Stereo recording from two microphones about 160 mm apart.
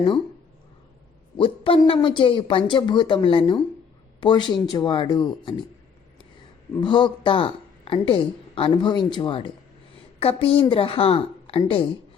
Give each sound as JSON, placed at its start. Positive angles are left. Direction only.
{"t": 1.4, "sound": "speech", "side_deg": 35}
{"t": 6.7, "sound": "speech", "side_deg": 30}